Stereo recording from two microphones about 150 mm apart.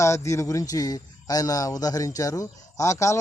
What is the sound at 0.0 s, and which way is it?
Speech, 20° left (ahead or behind).